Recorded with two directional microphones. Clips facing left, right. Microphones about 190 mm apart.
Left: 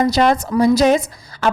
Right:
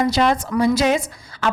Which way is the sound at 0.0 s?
40° left (ahead or behind).